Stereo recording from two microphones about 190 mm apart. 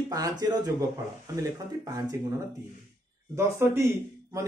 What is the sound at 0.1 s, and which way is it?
Speech, 20° right (ahead or behind).